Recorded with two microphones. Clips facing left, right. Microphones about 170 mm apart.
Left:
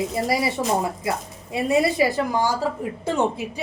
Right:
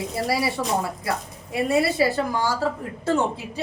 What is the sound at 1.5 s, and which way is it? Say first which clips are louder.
A woman's voice: left 1 dB; 20° left (ahead or behind).